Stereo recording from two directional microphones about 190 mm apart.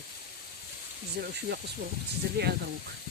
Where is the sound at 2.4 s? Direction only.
60° right (ahead or behind).